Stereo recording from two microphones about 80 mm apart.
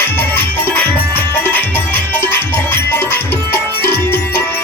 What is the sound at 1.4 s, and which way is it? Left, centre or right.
Music, left.